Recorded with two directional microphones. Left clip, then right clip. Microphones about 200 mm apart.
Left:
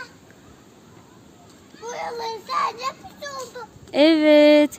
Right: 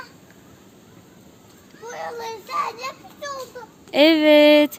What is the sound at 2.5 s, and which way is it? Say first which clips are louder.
Speech: left 2 dB; 15° right (ahead or behind).